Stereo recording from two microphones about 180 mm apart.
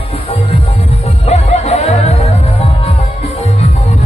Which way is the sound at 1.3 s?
35° left (ahead or behind).